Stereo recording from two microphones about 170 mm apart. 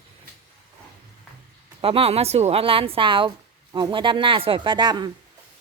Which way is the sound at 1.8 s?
35° right (ahead or behind).